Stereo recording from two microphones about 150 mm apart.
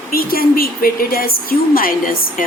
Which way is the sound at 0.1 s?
80° left.